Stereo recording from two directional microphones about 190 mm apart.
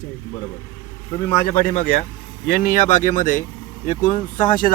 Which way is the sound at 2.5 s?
45° left (ahead or behind).